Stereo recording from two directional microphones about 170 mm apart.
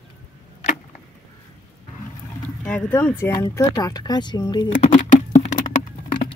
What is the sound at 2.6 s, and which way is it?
Speech, 10° left (ahead or behind).